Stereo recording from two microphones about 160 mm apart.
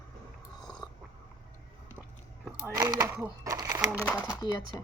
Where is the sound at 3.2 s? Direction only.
20° right (ahead or behind).